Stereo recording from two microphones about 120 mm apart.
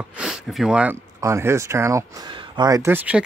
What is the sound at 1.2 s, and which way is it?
Speech, 25° right (ahead or behind).